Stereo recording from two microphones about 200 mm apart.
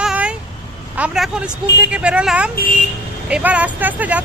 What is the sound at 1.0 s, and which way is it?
Speech, 5° right (ahead or behind).